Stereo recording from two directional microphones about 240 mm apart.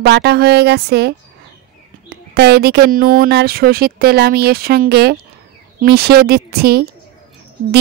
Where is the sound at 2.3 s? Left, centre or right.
Right.